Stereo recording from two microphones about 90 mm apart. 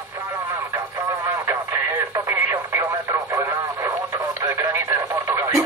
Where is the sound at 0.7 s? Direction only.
35° right (ahead or behind).